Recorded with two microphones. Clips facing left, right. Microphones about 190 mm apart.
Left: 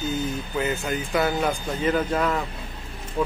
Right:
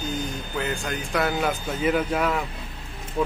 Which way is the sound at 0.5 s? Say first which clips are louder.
Left 2 dB; 5° left (ahead or behind).